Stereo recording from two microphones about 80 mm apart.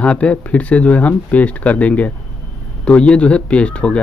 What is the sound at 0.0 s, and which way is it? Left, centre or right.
Speech, centre.